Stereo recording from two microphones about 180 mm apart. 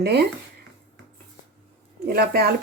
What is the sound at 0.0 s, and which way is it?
Speech, 65° right (ahead or behind).